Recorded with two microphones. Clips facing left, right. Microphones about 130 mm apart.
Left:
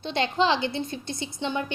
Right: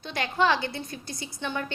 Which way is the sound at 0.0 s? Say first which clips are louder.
Left 2 dB; 25° left (ahead or behind).